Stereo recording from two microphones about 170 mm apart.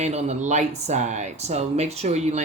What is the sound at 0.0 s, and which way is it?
Speech, 40° right (ahead or behind).